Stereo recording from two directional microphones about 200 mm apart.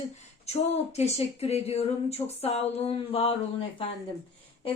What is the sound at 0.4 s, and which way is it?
Speech, 30° left (ahead or behind).